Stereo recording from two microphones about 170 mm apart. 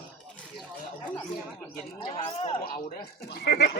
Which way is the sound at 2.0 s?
35° left (ahead or behind).